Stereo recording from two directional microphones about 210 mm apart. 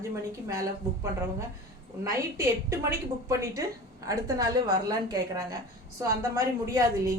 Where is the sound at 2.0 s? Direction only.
15° right (ahead or behind).